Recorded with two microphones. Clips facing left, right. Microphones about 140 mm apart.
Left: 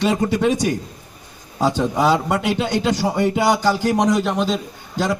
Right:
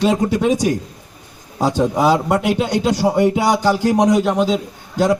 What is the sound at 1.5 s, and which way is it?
Speech, 10° right (ahead or behind).